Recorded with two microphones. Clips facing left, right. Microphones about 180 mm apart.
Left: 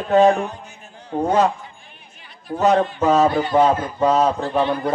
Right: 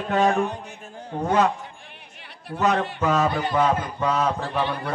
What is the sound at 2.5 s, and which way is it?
A man's voice, 40° left (ahead or behind).